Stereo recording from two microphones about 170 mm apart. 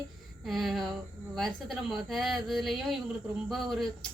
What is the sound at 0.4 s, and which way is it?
A woman's voice, centre (ahead or behind).